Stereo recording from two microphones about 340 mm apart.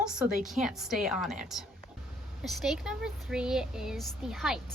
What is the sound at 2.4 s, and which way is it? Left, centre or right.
Speech, centre.